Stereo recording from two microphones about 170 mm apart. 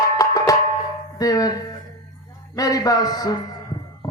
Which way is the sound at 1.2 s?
20° left (ahead or behind).